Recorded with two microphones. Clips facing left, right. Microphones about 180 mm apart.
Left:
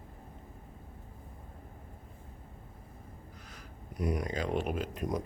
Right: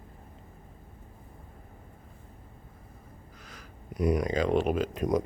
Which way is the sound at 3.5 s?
90° right.